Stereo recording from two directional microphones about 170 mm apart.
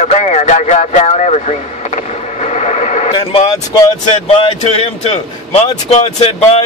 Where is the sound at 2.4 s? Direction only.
40° left (ahead or behind).